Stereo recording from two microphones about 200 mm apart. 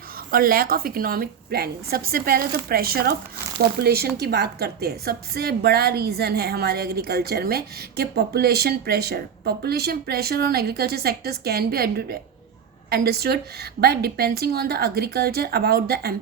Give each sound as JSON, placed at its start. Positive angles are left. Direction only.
{"t": 0.3, "sound": "a woman's voice", "side_deg": -45}